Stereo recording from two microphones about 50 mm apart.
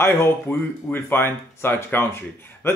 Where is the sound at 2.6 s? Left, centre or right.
Left.